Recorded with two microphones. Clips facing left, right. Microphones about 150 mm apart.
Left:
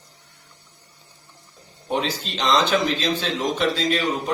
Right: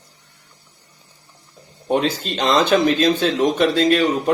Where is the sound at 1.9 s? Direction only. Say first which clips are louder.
Right 6 dB; 55° right (ahead or behind).